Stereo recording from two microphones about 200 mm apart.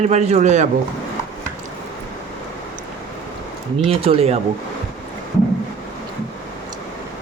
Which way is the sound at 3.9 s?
30° right (ahead or behind).